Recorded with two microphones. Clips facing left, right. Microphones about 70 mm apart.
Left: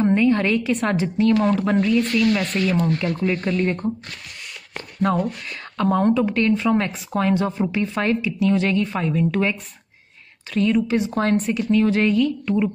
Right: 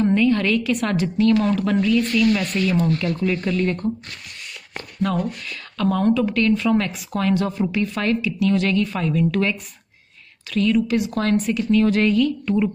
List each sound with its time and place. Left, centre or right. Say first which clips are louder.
0.0 s a woman's voice: even; left
2.4 s speech: even; left
2.8 s a woman's voice: even; left